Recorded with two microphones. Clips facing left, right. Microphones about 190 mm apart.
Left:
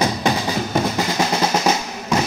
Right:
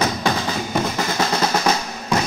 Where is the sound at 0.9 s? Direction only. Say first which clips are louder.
Left 1 dB; 15° left (ahead or behind).